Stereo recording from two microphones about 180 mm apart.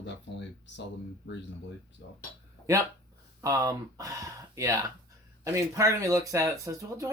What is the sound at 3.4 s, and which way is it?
Speech, 20° right (ahead or behind).